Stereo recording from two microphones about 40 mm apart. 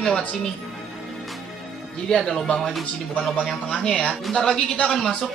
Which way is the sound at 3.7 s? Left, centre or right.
Centre.